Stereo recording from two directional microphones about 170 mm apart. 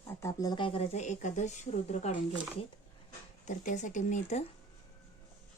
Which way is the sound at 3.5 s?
45° left (ahead or behind).